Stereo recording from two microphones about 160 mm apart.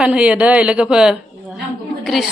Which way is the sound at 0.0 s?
5° right (ahead or behind).